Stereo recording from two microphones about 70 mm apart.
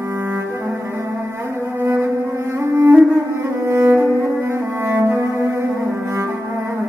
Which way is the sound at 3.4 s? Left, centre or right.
Right.